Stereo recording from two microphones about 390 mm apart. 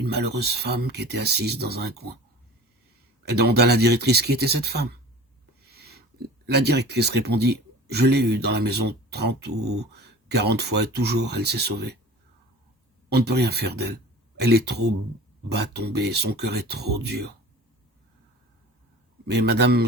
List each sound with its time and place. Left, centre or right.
0.0 s speech: right
3.2 s speech: right
13.1 s speech: right
19.3 s speech: right